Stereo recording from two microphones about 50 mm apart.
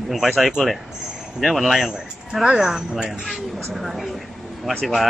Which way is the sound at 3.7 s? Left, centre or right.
Centre.